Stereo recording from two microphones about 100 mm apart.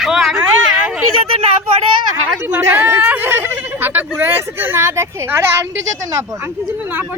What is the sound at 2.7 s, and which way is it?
Speech, 20° right (ahead or behind).